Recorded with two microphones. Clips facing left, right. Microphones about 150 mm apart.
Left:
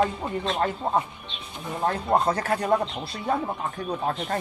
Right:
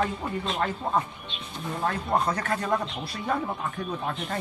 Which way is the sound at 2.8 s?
25° left (ahead or behind).